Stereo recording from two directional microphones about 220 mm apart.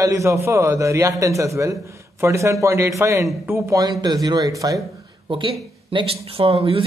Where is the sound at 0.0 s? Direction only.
15° right (ahead or behind).